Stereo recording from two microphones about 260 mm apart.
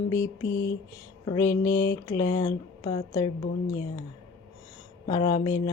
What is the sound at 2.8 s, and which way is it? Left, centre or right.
Speech, centre.